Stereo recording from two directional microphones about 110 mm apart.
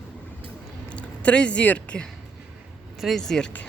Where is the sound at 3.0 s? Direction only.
Centre (ahead or behind).